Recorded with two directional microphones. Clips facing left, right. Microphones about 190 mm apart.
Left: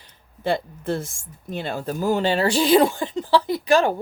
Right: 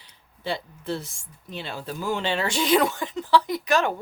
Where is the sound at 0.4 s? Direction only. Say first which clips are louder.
Left 6 dB; 50° left (ahead or behind).